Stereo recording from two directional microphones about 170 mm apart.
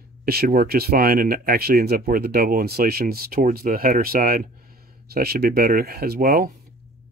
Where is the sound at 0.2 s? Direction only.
65° right (ahead or behind).